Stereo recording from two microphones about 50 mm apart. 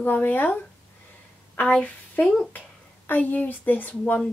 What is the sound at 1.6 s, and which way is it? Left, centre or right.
Speech, centre.